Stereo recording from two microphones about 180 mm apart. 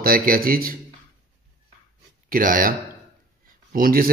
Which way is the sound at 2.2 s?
50° right (ahead or behind).